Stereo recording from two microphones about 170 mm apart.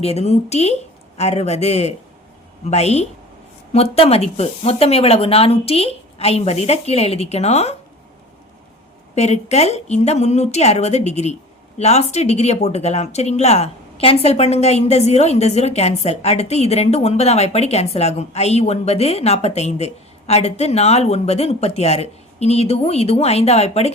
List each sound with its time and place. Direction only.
0.0 s speech: 40° left (ahead or behind)
9.1 s speech: 40° left (ahead or behind)